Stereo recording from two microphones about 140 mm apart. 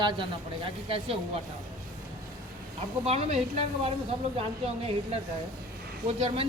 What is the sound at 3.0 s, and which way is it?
Speech, 50° right (ahead or behind).